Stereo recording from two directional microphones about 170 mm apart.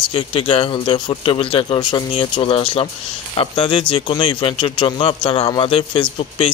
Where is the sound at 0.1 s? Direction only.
30° left (ahead or behind).